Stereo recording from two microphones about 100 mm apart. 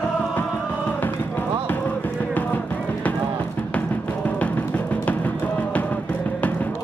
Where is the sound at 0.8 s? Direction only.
15° left (ahead or behind).